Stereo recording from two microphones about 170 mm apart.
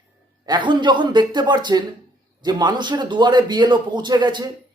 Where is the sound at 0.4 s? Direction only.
25° right (ahead or behind).